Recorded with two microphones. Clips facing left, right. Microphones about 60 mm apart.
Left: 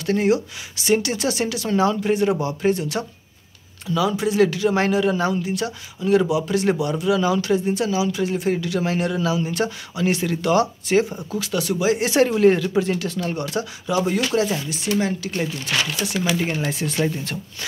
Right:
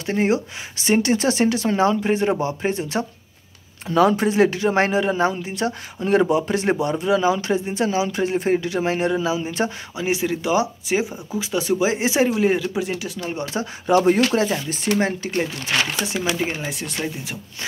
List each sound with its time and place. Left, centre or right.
0.0 s speech: right
3.8 s speech: right
13.8 s speech: right; by 16.7 s centre
16.7 s speech: centre